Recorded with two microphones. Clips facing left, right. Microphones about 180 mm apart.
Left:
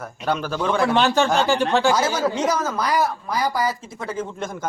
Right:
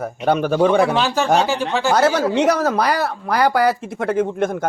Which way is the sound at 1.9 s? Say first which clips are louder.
Right 5 dB; 65° right (ahead or behind).